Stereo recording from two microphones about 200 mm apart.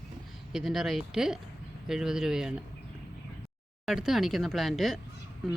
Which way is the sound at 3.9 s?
Centre (ahead or behind).